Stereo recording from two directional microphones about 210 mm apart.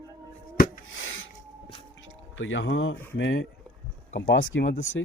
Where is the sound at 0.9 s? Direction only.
70° left (ahead or behind).